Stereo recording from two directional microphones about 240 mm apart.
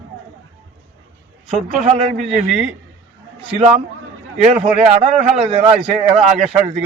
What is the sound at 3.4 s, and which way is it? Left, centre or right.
Speech, right.